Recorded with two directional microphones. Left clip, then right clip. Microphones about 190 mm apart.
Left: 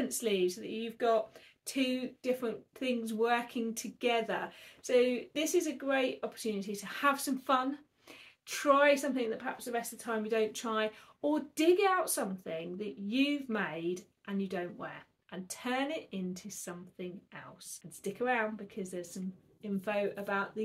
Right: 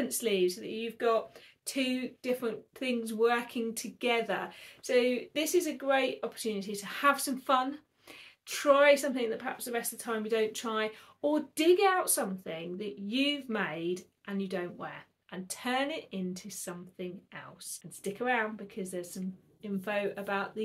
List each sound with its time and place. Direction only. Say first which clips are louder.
0.2 s speech: right 3 dB; 5° right (ahead or behind)